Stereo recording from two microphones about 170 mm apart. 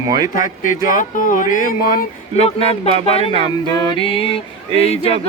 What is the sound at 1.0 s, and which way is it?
Speech, 50° left (ahead or behind).